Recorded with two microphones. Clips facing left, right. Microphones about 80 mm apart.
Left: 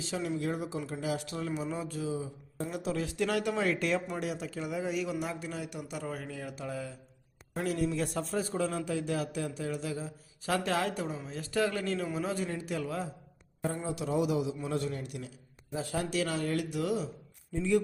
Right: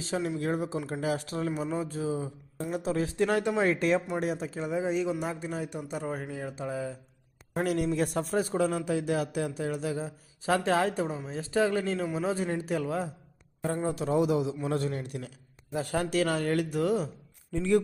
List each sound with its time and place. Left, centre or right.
0.0 s speech: right
7.5 s speech: right
15.7 s speech: right
17.5 s speech: right